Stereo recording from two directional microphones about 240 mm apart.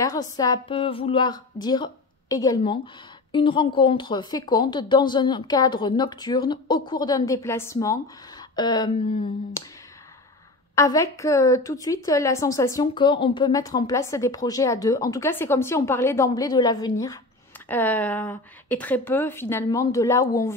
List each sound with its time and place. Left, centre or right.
0.0 s speech: centre
10.7 s speech: centre